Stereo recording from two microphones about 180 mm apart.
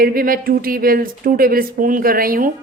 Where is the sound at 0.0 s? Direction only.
55° right (ahead or behind).